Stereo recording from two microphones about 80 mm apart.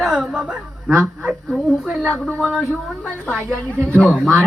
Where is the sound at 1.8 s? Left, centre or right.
Centre.